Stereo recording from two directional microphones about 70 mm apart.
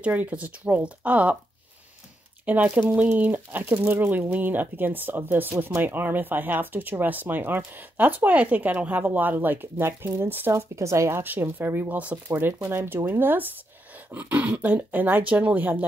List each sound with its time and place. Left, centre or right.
0.0 s speech: right
2.4 s speech: right
10.5 s speech: right
11.5 s speech: right